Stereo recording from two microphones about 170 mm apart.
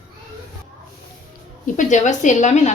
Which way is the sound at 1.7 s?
45° left (ahead or behind).